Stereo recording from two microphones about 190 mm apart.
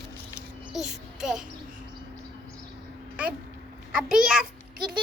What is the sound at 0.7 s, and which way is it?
Speech, 5° right (ahead or behind).